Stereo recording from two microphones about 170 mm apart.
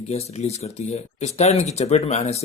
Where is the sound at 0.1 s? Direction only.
40° left (ahead or behind).